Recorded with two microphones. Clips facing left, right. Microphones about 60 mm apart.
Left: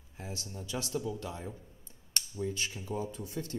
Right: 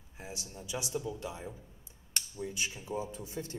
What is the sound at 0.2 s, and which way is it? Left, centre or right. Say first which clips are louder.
A man's voice: left 2 dB; centre.